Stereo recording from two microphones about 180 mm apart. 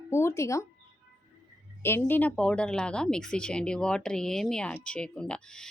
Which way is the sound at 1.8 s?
10° left (ahead or behind).